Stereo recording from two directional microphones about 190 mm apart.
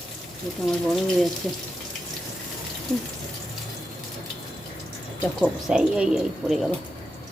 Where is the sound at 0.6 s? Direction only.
Centre (ahead or behind).